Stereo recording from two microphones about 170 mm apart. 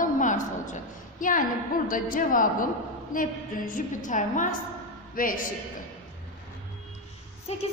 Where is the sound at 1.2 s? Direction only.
50° left (ahead or behind).